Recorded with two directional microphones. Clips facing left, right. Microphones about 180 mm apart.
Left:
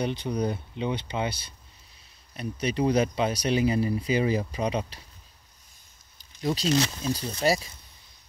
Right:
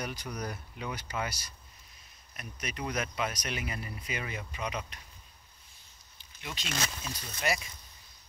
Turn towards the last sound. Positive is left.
turn(degrees=35)  # may be behind; listen again after turning